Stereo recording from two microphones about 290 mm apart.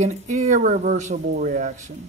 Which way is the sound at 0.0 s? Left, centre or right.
Right.